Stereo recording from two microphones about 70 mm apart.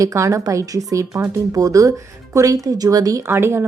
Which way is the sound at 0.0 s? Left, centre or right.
Right.